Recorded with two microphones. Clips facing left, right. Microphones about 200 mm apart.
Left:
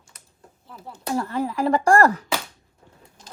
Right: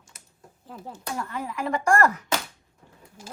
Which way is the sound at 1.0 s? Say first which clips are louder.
Left 8 dB; 35° left (ahead or behind).